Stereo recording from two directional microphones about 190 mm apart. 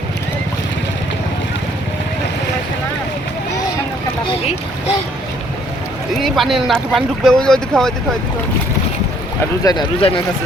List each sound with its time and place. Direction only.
6.1 s speech: centre (ahead or behind)
9.6 s speech: 25° left (ahead or behind)